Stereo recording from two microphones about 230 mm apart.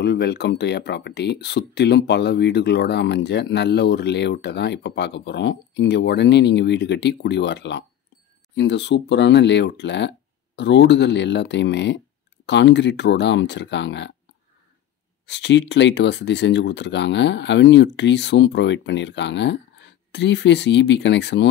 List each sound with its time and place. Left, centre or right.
0.0 s speech: left
15.2 s speech: left